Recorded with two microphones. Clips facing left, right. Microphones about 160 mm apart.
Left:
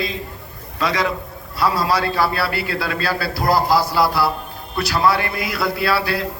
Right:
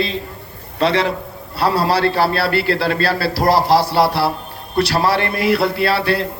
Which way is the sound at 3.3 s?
70° right (ahead or behind).